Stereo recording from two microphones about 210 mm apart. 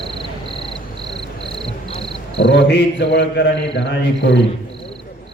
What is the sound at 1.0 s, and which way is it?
Cricket, 20° right (ahead or behind).